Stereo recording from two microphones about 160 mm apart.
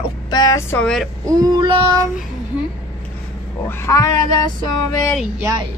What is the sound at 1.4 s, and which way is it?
Child singing, 30° right (ahead or behind).